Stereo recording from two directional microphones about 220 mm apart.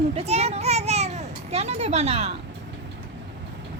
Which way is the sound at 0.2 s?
30° right (ahead or behind).